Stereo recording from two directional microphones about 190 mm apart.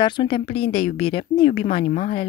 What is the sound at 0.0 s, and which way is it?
A woman's voice, 25° left (ahead or behind).